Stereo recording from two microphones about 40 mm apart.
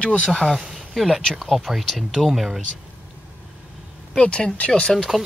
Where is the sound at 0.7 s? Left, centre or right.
Centre.